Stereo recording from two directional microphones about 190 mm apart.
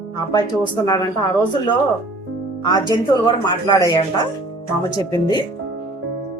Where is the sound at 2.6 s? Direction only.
20° left (ahead or behind).